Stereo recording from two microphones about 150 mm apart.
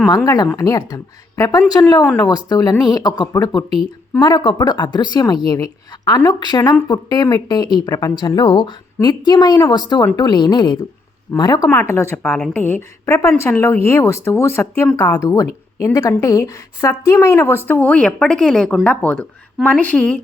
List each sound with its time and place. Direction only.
0.3 s speech: 25° left (ahead or behind)
11.7 s speech: 15° left (ahead or behind)